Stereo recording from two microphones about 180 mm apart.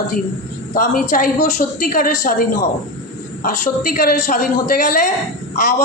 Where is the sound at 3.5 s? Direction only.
50° left (ahead or behind).